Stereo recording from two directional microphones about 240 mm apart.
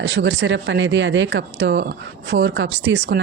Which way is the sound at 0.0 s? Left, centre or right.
Right.